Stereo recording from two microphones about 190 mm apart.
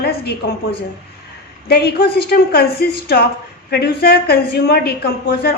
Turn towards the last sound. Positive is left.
turn(degrees=55)  # may be behind; listen again after turning